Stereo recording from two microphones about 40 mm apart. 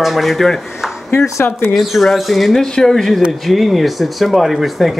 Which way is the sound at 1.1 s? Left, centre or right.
Left.